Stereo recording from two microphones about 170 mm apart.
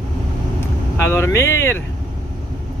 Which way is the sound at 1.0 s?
15° left (ahead or behind).